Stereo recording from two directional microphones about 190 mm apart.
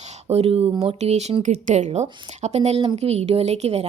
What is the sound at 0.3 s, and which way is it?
Speech, 35° right (ahead or behind).